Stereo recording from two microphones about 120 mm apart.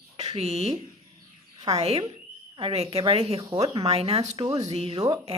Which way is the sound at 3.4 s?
30° right (ahead or behind).